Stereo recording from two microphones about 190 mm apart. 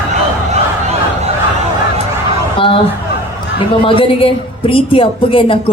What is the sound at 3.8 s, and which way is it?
A woman's voice, 25° left (ahead or behind).